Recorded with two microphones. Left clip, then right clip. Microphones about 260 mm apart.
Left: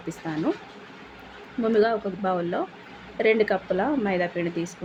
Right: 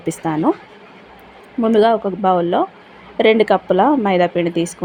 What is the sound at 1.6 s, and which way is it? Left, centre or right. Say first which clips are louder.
Speech: right 8 dB; right.